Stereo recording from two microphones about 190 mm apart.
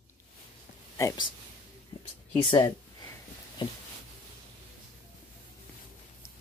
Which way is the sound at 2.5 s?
20° left (ahead or behind).